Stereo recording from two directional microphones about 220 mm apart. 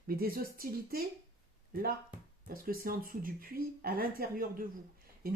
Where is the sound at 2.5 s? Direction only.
40° right (ahead or behind).